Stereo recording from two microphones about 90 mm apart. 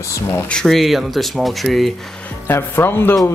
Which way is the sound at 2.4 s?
25° left (ahead or behind).